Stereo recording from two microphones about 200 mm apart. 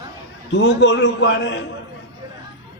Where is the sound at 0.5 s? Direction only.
60° left (ahead or behind).